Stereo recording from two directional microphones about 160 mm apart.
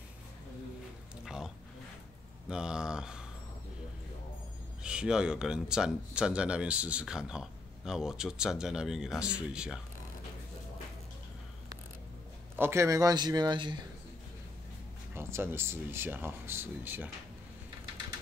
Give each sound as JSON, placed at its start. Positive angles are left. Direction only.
{"t": 1.2, "sound": "a sound", "side_deg": -5}
{"t": 2.4, "sound": "speech", "side_deg": -5}
{"t": 4.8, "sound": "speech", "side_deg": -5}
{"t": 12.5, "sound": "a man's voice", "side_deg": -15}
{"t": 15.1, "sound": "speech", "side_deg": -15}